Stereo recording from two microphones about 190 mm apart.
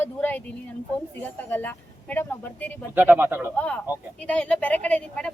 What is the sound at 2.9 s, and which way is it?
Speech, 10° right (ahead or behind).